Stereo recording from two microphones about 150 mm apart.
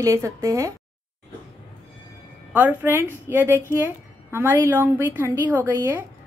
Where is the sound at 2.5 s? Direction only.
15° right (ahead or behind).